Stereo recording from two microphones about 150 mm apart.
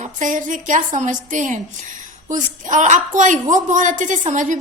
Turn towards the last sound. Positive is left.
turn(degrees=-55)  # may be behind; listen again after turning